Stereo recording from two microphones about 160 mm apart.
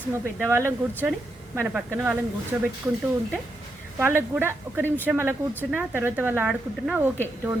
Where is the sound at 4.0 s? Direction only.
15° right (ahead or behind).